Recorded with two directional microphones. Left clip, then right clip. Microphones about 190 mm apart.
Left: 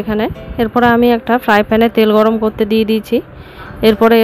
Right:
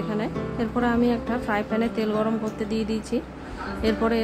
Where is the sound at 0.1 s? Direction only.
45° left (ahead or behind).